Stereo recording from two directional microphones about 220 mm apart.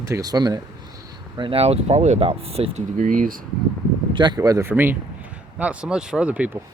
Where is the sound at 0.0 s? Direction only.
15° right (ahead or behind); by 3.4 s 40° right (ahead or behind).